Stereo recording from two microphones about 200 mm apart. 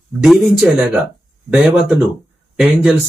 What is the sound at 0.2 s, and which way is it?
Speech, centre (ahead or behind).